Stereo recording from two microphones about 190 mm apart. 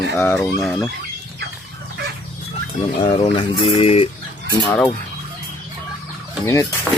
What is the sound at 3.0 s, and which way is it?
Speech, 30° left (ahead or behind).